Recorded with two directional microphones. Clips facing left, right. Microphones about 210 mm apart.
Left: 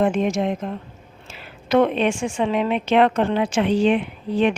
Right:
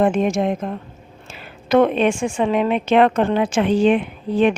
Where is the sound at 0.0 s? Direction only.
50° right (ahead or behind).